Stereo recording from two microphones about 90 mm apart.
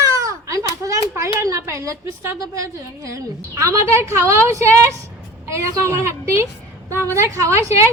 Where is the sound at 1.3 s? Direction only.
35° right (ahead or behind).